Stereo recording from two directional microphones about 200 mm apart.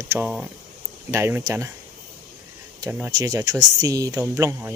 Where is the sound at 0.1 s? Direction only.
5° right (ahead or behind).